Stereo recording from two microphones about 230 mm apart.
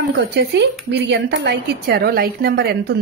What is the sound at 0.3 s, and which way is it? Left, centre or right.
Speech, right.